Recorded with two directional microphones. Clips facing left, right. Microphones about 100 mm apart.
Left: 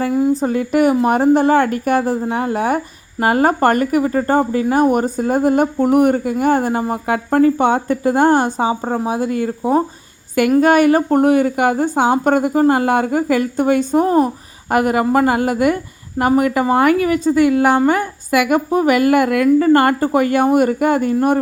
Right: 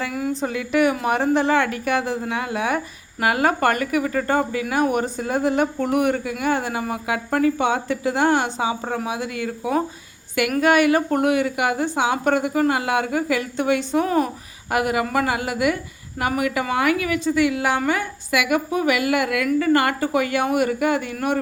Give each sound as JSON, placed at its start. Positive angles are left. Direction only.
{"t": 0.1, "sound": "a woman's voice", "side_deg": 25}
{"t": 0.5, "sound": "speech", "side_deg": 40}